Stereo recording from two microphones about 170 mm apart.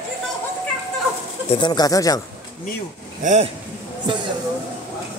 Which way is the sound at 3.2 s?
45° right (ahead or behind).